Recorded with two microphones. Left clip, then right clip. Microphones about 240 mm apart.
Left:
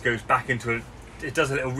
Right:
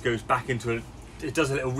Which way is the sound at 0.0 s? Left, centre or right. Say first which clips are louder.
Left 3 dB; centre.